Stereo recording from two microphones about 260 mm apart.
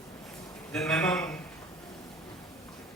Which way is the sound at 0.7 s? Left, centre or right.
Centre.